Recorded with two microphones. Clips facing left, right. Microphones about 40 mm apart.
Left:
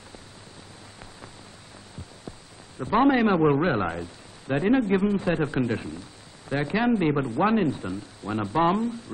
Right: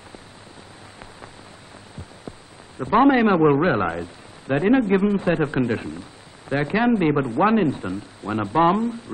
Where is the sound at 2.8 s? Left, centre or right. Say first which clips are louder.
Right 4 dB; centre.